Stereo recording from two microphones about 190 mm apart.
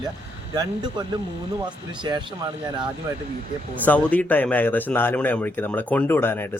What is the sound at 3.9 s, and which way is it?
Speech, 10° left (ahead or behind).